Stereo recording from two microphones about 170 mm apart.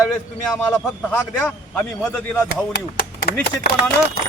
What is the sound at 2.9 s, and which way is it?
Speech, 70° left (ahead or behind).